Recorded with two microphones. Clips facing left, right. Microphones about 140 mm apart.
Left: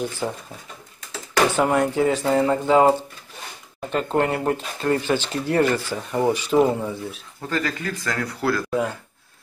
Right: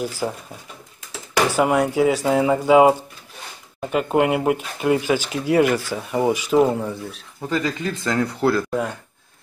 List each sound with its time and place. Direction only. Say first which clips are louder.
0.2 s speech: right 1 dB; 5° right (ahead or behind)
6.6 s speech: right 1 dB; centre (ahead or behind)
7.4 s speech: right 3 dB; 15° right (ahead or behind)